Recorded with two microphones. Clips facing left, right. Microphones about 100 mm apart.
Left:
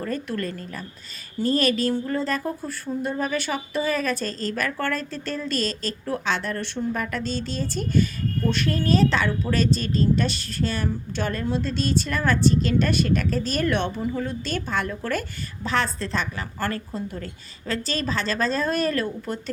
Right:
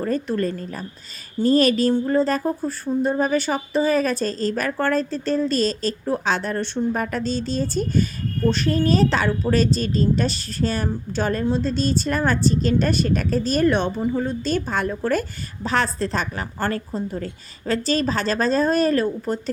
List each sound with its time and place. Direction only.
0.0 s a woman's voice: 30° right (ahead or behind)